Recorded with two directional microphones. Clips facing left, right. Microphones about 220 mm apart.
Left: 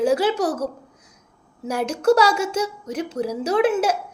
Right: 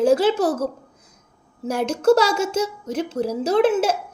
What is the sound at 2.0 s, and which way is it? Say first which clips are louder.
Speech: right 1 dB; 25° right (ahead or behind).